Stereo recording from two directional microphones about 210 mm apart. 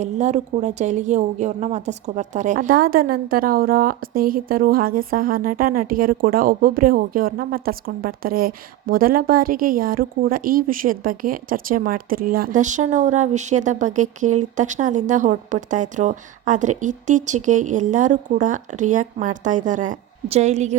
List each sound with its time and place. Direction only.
0.0 s a woman's voice: 35° right (ahead or behind)